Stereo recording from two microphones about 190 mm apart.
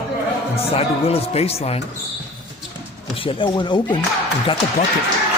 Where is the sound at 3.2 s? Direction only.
25° left (ahead or behind).